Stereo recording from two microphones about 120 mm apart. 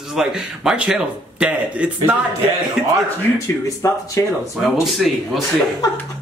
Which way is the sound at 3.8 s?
25° left (ahead or behind).